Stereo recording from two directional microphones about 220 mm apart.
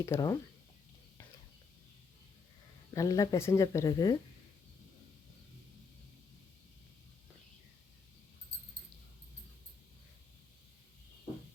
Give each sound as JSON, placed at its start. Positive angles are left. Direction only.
{"t": 0.0, "sound": "speech", "side_deg": 15}
{"t": 2.9, "sound": "speech", "side_deg": 15}